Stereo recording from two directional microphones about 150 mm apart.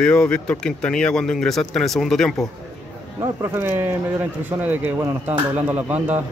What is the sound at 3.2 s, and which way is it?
Speech, 15° right (ahead or behind).